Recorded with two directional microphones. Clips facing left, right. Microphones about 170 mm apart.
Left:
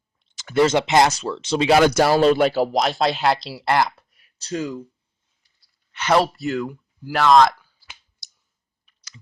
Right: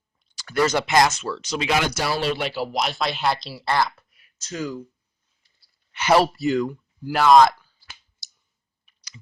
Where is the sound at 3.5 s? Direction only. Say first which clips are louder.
Left 3 dB; 15° left (ahead or behind).